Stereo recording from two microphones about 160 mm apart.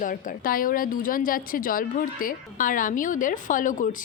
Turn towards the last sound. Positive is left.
turn(degrees=55)  # may be behind; listen again after turning